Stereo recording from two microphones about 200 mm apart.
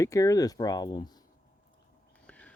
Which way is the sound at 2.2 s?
5° left (ahead or behind).